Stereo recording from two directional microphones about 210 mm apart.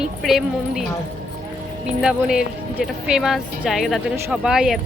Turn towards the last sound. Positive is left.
turn(degrees=0)  # may be behind; listen again after turning